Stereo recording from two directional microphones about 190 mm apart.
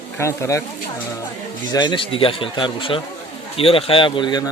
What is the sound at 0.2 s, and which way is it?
Speech, 15° left (ahead or behind).